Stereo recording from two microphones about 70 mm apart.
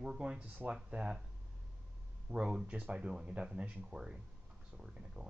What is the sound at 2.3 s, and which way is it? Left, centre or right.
Speech, centre.